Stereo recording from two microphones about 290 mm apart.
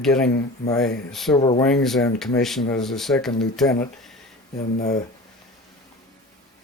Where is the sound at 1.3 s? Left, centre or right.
Centre.